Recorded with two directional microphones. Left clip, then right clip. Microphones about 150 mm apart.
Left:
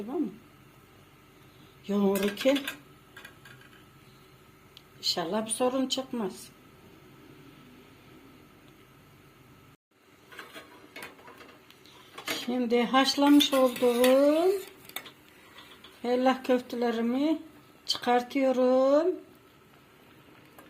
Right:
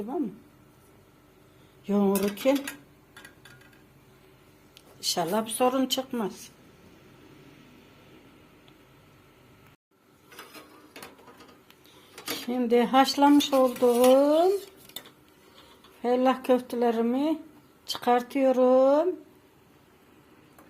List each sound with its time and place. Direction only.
1.9 s a sound: 20° right (ahead or behind)
5.1 s speech: 10° right (ahead or behind)
12.2 s speech: 20° right (ahead or behind)
16.0 s speech: 10° right (ahead or behind)